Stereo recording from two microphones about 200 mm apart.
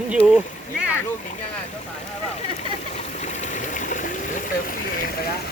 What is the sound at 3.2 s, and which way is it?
Stream, 35° left (ahead or behind).